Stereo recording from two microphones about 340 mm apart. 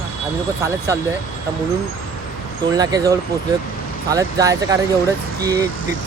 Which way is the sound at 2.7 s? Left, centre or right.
Centre.